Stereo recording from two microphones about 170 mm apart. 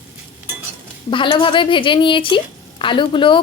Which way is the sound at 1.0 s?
30° left (ahead or behind).